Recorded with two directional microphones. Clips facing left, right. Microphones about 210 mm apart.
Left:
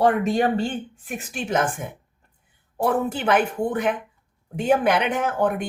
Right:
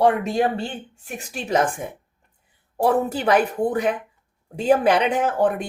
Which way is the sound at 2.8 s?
35° right (ahead or behind).